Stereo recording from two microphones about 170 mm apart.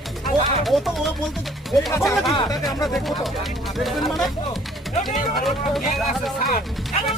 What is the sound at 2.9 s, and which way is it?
Speech, centre (ahead or behind).